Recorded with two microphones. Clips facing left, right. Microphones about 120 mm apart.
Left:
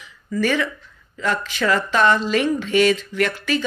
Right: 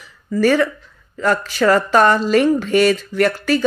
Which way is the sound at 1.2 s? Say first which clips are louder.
Right 6 dB; 45° right (ahead or behind).